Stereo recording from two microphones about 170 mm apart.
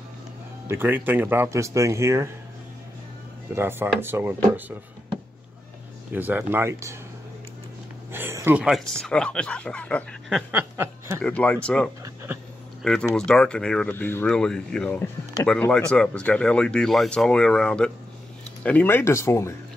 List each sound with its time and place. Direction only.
0.7 s speech: 10° right (ahead or behind)
3.5 s speech: 15° right (ahead or behind)
6.1 s speech: 10° right (ahead or behind)
8.1 s speech: 15° right (ahead or behind)
8.6 s speech: centre (ahead or behind)
10.5 s a sound: 10° right (ahead or behind)
11.2 s speech: 10° left (ahead or behind)
12.0 s a sound: 15° right (ahead or behind)
12.8 s speech: 5° left (ahead or behind)